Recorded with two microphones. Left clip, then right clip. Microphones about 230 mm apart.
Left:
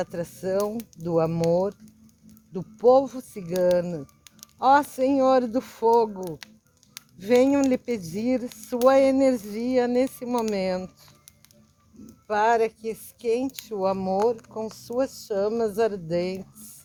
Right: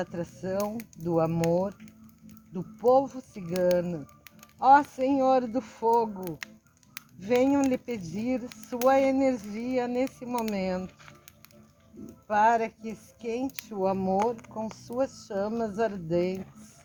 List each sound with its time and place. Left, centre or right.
0.0 s speech: left
12.3 s speech: left